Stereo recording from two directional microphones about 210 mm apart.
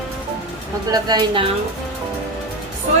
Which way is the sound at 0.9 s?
20° right (ahead or behind).